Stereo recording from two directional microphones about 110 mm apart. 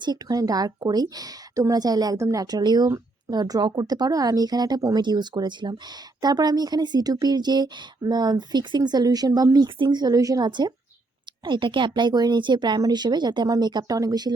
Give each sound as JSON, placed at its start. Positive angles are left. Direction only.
{"t": 0.0, "sound": "speech", "side_deg": -40}